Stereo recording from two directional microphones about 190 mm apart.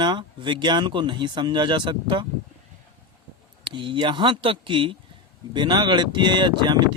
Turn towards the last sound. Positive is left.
turn(degrees=-25)  # may be behind; listen again after turning